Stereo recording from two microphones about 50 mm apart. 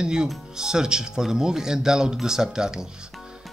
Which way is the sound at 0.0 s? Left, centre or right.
Centre.